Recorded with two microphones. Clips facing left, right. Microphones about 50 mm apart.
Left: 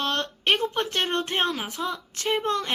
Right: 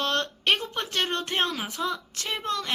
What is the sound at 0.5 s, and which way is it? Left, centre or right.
A woman's voice, left.